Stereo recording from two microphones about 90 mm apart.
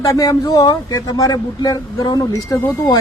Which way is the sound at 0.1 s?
40° left (ahead or behind).